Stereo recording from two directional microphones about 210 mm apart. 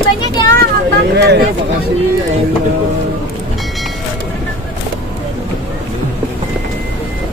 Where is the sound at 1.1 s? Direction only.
55° right (ahead or behind).